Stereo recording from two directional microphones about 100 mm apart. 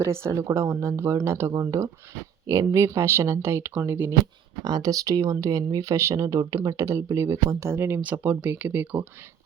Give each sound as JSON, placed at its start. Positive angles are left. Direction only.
{"t": 0.0, "sound": "speech", "side_deg": -30}
{"t": 4.6, "sound": "speech", "side_deg": -40}